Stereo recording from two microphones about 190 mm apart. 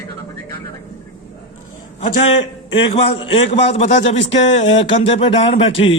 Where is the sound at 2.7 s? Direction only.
30° left (ahead or behind).